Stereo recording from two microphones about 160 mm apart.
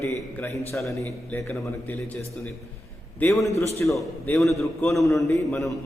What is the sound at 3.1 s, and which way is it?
Speech, 15° left (ahead or behind).